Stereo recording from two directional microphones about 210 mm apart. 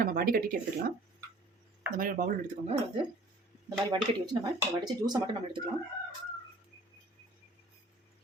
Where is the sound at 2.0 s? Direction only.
40° right (ahead or behind).